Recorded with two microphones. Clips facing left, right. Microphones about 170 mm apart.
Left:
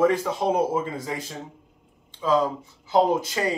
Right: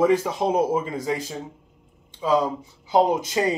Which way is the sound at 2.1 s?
15° right (ahead or behind).